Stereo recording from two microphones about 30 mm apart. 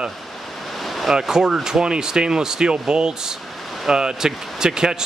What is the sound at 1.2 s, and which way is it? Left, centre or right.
Speech, centre.